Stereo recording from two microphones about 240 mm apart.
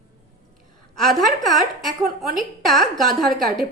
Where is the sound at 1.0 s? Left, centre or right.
Centre.